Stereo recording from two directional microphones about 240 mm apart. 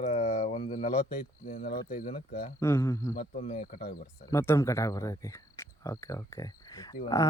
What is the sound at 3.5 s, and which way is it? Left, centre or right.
Speech, left.